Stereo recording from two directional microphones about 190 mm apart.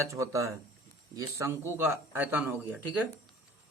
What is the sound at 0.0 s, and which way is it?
Speech, 15° right (ahead or behind).